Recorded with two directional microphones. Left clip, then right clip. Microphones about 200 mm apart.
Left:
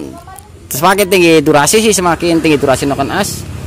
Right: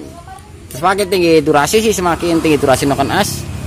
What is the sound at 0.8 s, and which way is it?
Speech, 30° left (ahead or behind).